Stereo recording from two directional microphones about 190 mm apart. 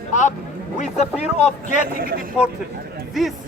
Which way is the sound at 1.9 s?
50° right (ahead or behind).